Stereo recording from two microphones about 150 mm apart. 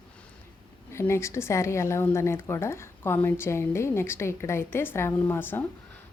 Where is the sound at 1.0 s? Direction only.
20° left (ahead or behind).